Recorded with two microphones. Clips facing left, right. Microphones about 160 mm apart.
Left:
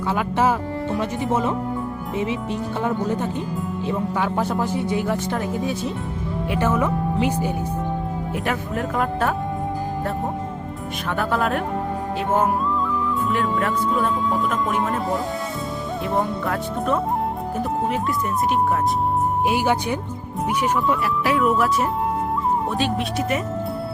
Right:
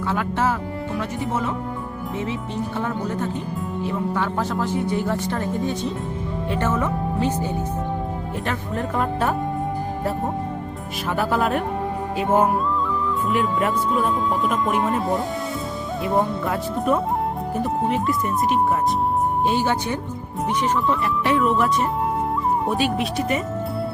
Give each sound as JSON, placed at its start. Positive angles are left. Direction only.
{"t": 0.2, "sound": "speech", "side_deg": 15}
{"t": 4.1, "sound": "speech", "side_deg": 10}
{"t": 11.1, "sound": "speech", "side_deg": 0}
{"t": 19.5, "sound": "speech", "side_deg": 10}
{"t": 23.0, "sound": "speech", "side_deg": 0}